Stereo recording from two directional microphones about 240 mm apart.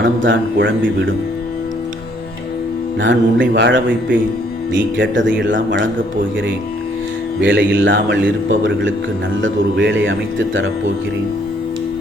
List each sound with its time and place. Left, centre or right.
0.0 s speech: right
3.0 s speech: right
7.4 s speech: right